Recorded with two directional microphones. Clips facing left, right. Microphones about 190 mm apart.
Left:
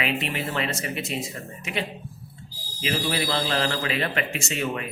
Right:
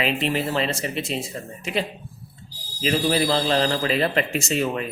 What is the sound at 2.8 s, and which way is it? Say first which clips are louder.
A man's voice: right 5 dB; 35° right (ahead or behind).